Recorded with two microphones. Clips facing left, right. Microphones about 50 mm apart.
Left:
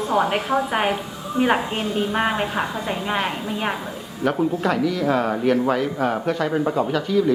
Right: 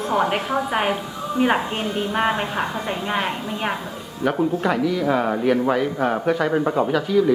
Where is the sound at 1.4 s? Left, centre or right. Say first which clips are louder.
Even; centre.